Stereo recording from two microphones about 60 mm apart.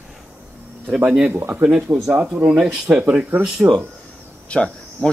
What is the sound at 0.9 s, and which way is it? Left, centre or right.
Speech, centre.